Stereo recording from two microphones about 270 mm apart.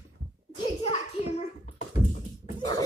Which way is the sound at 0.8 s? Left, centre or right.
Left.